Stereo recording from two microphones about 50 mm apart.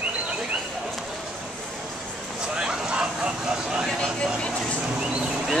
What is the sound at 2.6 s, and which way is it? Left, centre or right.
Vehicle, centre.